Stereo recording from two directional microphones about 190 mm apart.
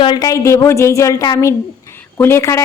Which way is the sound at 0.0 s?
20° left (ahead or behind).